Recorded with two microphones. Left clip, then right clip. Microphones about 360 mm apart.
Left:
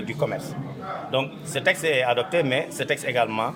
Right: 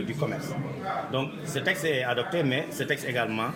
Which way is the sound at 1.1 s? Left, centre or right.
Left.